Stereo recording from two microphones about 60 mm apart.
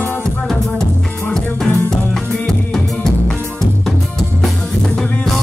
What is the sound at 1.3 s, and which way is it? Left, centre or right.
Music, centre.